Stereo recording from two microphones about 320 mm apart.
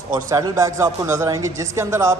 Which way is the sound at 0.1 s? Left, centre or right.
Centre.